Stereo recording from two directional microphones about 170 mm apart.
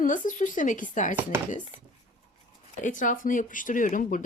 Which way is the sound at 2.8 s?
50° left (ahead or behind).